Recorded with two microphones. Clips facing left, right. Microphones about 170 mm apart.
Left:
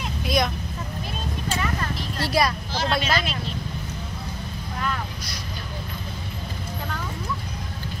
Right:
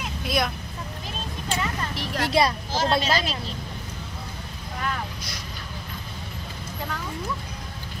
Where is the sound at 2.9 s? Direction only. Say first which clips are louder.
Even; 35° right (ahead or behind).